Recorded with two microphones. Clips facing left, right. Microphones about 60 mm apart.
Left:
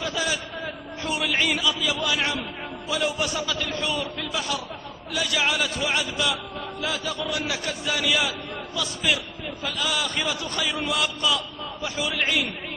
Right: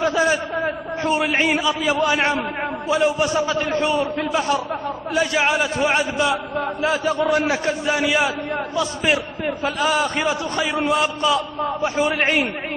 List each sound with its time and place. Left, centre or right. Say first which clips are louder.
0.0 s a man's voice: right 9 dB; right